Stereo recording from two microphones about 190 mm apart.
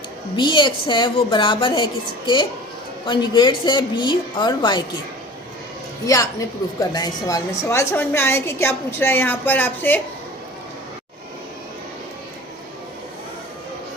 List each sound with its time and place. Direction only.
0.3 s a woman's voice: 25° left (ahead or behind)
6.1 s a woman's voice: 15° left (ahead or behind)